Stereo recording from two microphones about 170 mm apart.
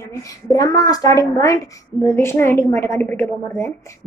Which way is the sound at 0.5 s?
20° left (ahead or behind).